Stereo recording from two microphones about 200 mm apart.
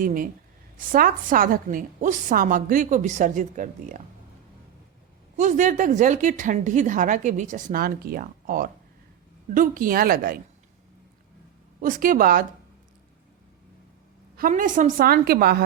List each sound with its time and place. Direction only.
0.0 s a woman's voice: 45° right (ahead or behind)
5.4 s a woman's voice: 40° right (ahead or behind)
11.8 s a woman's voice: 45° right (ahead or behind)
14.3 s a woman's voice: 45° right (ahead or behind)